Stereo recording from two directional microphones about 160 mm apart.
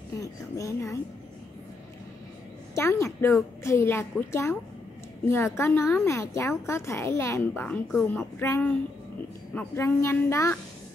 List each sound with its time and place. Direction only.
0.2 s speech: 20° left (ahead or behind)
2.7 s a woman's voice: 15° left (ahead or behind)